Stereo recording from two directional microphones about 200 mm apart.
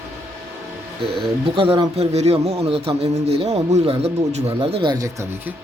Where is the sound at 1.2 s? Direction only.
25° right (ahead or behind).